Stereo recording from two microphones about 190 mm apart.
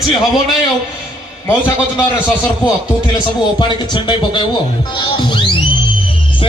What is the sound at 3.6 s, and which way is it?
A man's voice, 25° left (ahead or behind).